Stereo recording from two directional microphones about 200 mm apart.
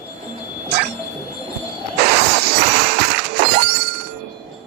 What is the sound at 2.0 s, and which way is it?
Music, 55° right (ahead or behind).